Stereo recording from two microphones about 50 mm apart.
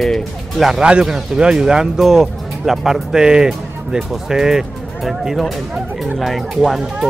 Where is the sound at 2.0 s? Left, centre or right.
Centre.